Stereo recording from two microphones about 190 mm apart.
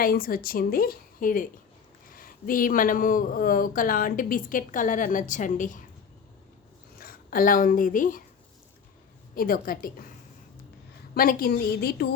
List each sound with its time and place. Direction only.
0.0 s speech: 50° left (ahead or behind)
7.0 s a woman's voice: 50° left (ahead or behind)
9.3 s speech: 50° left (ahead or behind)
11.1 s speech: 50° left (ahead or behind)